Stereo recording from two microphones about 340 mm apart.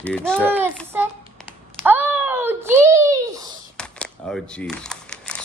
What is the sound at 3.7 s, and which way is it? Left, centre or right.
Camera, centre.